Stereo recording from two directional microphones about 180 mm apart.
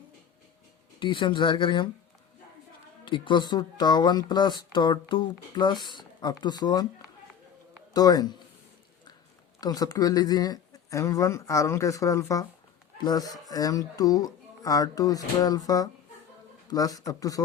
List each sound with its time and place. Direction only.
0.9 s speech: 25° left (ahead or behind)
3.0 s speech: 25° left (ahead or behind)
7.9 s speech: 20° left (ahead or behind)
9.6 s speech: 20° left (ahead or behind)